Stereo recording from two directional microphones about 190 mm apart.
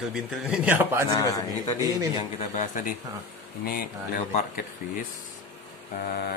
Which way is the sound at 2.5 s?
45° left (ahead or behind).